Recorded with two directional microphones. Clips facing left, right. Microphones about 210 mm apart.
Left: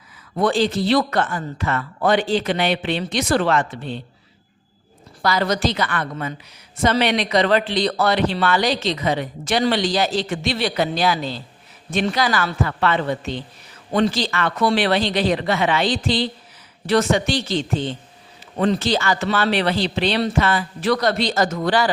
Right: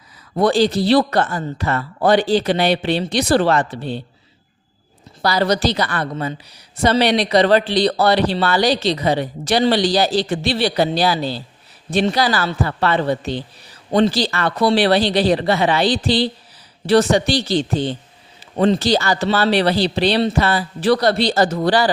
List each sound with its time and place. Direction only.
0.3 s a man's voice: 35° right (ahead or behind)
5.2 s a man's voice: 35° right (ahead or behind)